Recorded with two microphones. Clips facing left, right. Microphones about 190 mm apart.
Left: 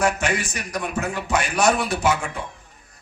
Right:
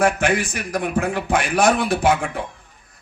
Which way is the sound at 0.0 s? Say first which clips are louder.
Right 4 dB; 55° right (ahead or behind).